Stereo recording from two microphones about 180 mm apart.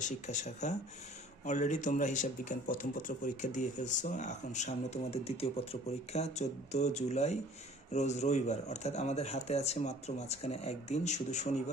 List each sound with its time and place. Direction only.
0.0 s a man's voice: 40° left (ahead or behind)